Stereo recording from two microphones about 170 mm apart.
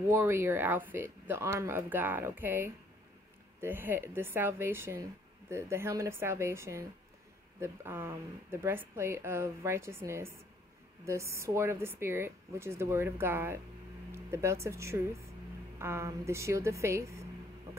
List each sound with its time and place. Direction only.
0.1 s a woman's voice: 15° right (ahead or behind)